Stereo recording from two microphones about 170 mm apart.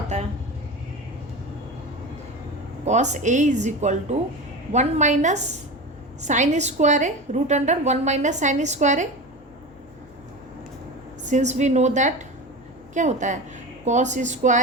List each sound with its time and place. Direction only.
0.1 s a sound: 45° right (ahead or behind)
2.8 s a woman's voice: 45° right (ahead or behind)
11.3 s a woman's voice: 45° right (ahead or behind)